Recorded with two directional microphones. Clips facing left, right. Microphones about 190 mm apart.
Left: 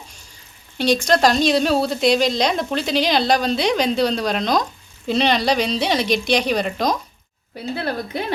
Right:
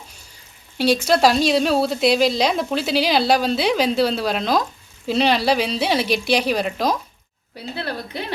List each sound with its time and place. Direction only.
0.8 s a woman's voice: 5° right (ahead or behind)
7.8 s speech: 50° left (ahead or behind)